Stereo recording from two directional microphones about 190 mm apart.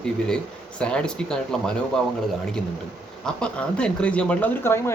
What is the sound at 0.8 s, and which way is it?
Speech, 5° left (ahead or behind).